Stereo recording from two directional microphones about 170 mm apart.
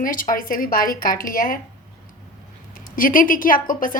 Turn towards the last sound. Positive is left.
turn(degrees=55)  # may be behind; listen again after turning